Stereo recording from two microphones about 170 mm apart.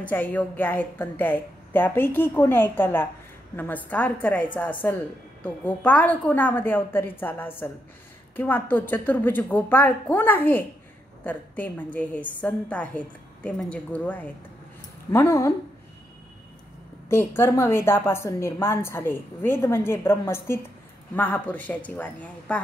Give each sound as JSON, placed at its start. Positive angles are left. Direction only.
{"t": 0.0, "sound": "a woman's voice", "side_deg": 10}
{"t": 17.1, "sound": "a woman's voice", "side_deg": 15}